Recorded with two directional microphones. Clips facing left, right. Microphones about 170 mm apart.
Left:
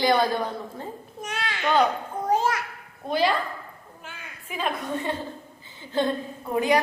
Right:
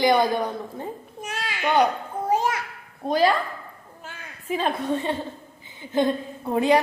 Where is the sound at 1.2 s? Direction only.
5° right (ahead or behind).